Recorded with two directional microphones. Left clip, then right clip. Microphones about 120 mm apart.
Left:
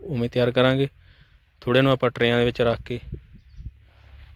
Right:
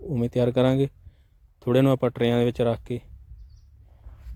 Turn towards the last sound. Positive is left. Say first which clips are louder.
# left 2 dB
turn(degrees=-25)  # may be behind; listen again after turning